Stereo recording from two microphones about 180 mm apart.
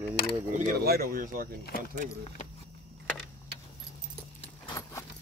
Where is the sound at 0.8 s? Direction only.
60° right (ahead or behind).